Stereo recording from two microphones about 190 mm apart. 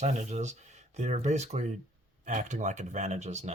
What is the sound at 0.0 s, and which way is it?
Speech, 35° right (ahead or behind).